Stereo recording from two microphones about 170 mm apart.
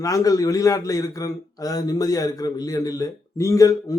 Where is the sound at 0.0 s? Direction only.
20° left (ahead or behind).